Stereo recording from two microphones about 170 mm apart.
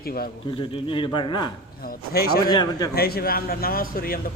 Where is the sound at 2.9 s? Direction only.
65° left (ahead or behind).